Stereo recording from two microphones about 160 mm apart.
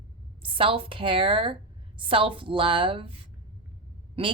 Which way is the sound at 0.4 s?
35° right (ahead or behind).